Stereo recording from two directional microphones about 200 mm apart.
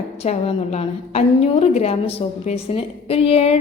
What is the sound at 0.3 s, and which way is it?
A woman's voice, 30° left (ahead or behind).